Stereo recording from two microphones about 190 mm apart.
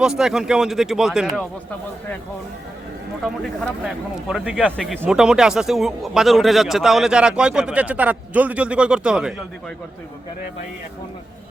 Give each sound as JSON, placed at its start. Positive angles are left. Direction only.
{"t": 0.0, "sound": "speech", "side_deg": -5}
{"t": 3.2, "sound": "speech", "side_deg": 0}